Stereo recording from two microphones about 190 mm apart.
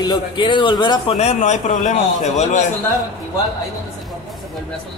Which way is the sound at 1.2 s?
35° left (ahead or behind).